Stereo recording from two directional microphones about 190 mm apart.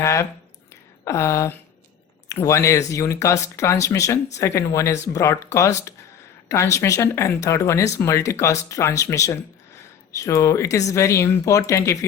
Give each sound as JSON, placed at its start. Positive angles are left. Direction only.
{"t": 0.0, "sound": "speech", "side_deg": 15}